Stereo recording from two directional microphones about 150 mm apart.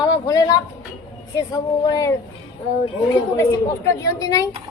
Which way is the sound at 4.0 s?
20° left (ahead or behind).